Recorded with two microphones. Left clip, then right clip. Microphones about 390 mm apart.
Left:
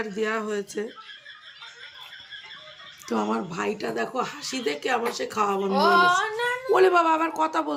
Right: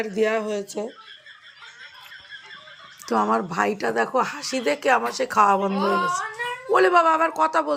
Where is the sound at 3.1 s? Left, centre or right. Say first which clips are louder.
Right 6 dB; centre.